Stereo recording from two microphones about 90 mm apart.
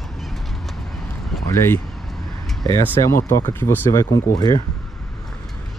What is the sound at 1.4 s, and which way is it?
Speech, 30° left (ahead or behind).